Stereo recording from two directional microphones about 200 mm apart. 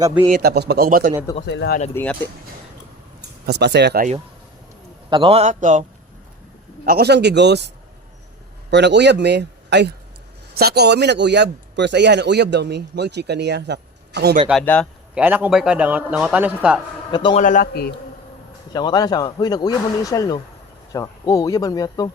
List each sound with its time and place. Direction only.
0.4 s a man's voice: 55° right (ahead or behind)
1.5 s speech: 55° left (ahead or behind)
1.9 s speech: 10° left (ahead or behind)
3.2 s speech: 55° right (ahead or behind)
5.0 s a man's voice: 25° right (ahead or behind)
6.8 s a man's voice: 50° right (ahead or behind)
8.7 s a man's voice: 60° right (ahead or behind)
14.6 s speech: 10° left (ahead or behind)
15.1 s a man's voice: 10° right (ahead or behind)
17.1 s a man's voice: 20° left (ahead or behind)
17.3 s a man's voice: 40° left (ahead or behind)
18.7 s speech: 20° left (ahead or behind)